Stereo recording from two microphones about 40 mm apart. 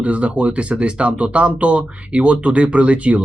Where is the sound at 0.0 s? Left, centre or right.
Right.